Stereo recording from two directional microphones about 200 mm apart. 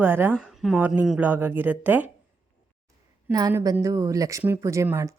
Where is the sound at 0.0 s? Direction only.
10° right (ahead or behind).